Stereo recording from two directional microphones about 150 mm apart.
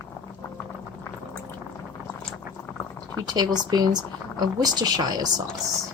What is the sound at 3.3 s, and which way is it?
Speech, 25° right (ahead or behind).